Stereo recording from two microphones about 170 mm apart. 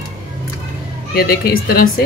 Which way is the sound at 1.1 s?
65° left (ahead or behind).